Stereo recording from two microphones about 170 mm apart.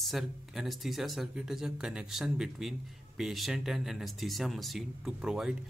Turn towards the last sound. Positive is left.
turn(degrees=-5)  # may be behind; listen again after turning